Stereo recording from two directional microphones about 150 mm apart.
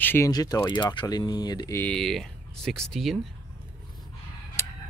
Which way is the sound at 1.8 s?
5° left (ahead or behind).